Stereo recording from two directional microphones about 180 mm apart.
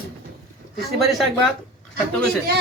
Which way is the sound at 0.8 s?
Centre (ahead or behind).